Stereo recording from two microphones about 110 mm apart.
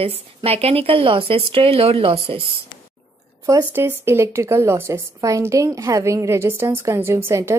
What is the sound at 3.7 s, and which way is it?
A woman's voice, 20° right (ahead or behind).